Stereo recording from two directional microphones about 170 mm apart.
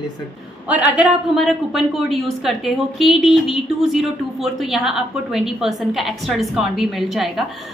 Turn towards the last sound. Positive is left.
turn(degrees=0)  # may be behind; listen again after turning